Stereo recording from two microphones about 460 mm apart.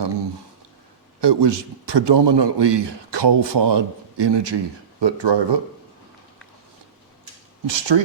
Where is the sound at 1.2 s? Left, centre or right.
Right.